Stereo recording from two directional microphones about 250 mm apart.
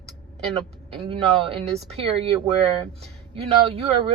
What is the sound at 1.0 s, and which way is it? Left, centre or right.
Speech, right.